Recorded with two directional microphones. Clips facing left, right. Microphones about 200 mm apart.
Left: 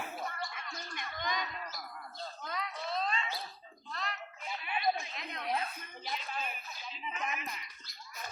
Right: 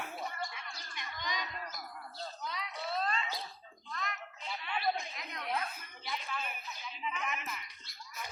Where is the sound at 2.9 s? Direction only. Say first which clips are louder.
Even; 5° right (ahead or behind).